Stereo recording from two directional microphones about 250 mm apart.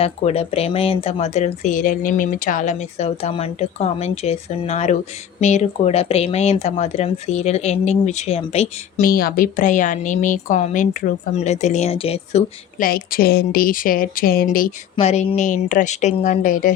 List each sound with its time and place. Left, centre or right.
0.0 s speech: left